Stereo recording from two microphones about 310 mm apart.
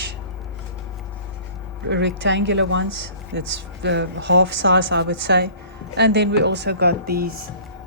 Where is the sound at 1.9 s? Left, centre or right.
Right.